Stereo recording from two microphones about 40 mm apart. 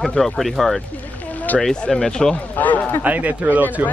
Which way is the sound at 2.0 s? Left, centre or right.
Centre.